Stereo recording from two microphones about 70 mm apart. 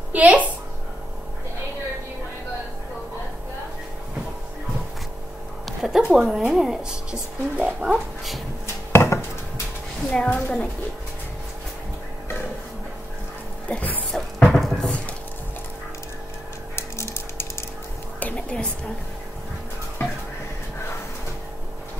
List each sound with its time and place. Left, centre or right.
0.1 s a woman's voice: right
5.7 s a woman's voice: centre
8.9 s chopping: left
10.1 s a woman's voice: centre
13.7 s speech: left
14.1 s music: centre
16.7 s a sound: left
18.2 s a sound: centre